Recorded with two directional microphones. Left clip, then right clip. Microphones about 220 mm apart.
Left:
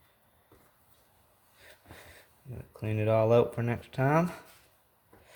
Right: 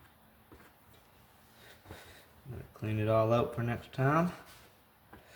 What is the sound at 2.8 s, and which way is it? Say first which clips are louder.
Speech: left 3 dB; 40° left (ahead or behind).